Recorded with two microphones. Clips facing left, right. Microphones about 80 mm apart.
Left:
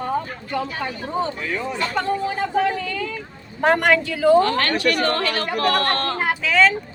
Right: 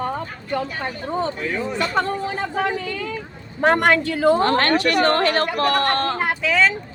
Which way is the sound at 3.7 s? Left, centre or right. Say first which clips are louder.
Right 1 dB; right.